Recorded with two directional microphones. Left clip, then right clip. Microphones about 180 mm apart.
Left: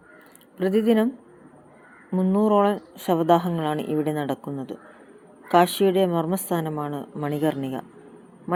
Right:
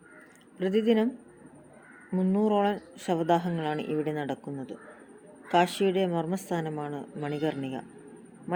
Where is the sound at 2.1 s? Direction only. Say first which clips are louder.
Left 6 dB; 15° left (ahead or behind).